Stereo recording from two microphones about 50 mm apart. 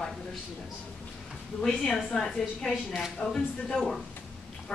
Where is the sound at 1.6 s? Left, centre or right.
Centre.